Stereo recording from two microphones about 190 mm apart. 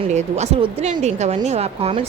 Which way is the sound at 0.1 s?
35° right (ahead or behind).